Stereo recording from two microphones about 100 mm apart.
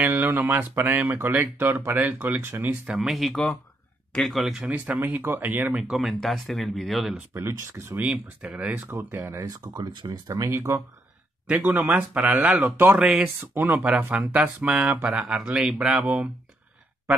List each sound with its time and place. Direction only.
0.0 s speech: 20° right (ahead or behind)
2.9 s speech: 5° right (ahead or behind); by 5.8 s 20° right (ahead or behind)
5.8 s speech: 5° right (ahead or behind)
7.4 s speech: 30° right (ahead or behind)
8.0 s speech: 15° right (ahead or behind)
9.4 s speech: 40° right (ahead or behind)
11.4 s speech: 15° right (ahead or behind)
16.0 s speech: 15° right (ahead or behind)